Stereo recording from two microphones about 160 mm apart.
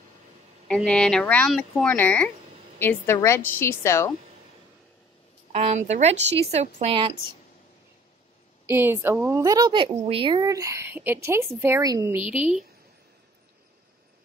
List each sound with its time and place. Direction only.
0.7 s a woman's voice: 5° left (ahead or behind)
5.5 s a woman's voice: 40° right (ahead or behind)
8.6 s a woman's voice: 15° right (ahead or behind)